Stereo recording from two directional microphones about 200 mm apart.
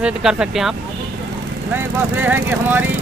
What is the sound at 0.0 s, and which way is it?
Speech, 5° right (ahead or behind).